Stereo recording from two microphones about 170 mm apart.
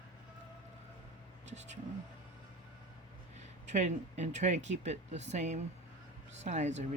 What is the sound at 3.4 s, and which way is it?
Speech, 45° right (ahead or behind).